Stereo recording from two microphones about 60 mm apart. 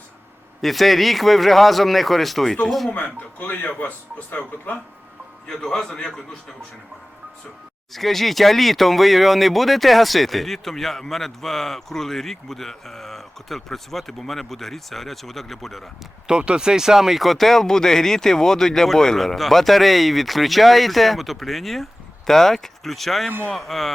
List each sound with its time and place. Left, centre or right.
0.6 s speech: centre
2.9 s speech: left
5.5 s a man's voice: centre
7.9 s speech: centre
16.2 s speech: centre